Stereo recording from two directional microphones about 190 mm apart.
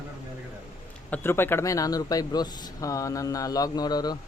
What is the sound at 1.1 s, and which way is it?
Speech, 10° left (ahead or behind).